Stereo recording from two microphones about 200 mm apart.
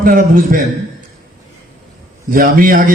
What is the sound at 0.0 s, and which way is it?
Speech, 45° right (ahead or behind).